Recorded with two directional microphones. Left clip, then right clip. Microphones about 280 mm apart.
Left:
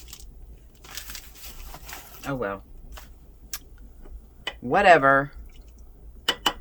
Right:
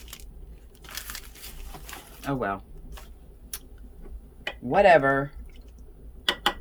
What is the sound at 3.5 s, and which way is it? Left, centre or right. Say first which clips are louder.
Tick-tock: left 4 dB; centre.